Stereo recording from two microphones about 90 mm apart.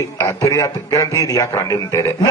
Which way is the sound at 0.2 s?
35° left (ahead or behind).